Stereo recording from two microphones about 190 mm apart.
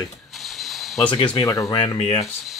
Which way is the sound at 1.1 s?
25° left (ahead or behind).